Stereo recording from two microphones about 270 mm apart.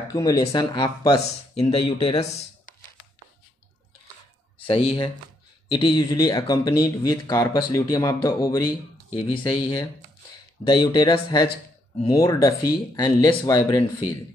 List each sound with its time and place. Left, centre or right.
0.1 s speech: centre
4.6 s speech: centre